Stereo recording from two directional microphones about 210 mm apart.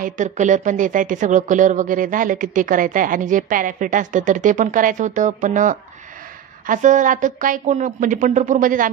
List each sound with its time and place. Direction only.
0.0 s speech: 35° right (ahead or behind)